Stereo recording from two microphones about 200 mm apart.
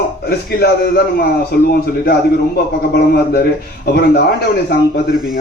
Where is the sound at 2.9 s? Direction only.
50° left (ahead or behind).